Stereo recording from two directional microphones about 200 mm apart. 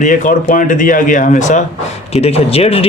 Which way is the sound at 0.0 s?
40° left (ahead or behind).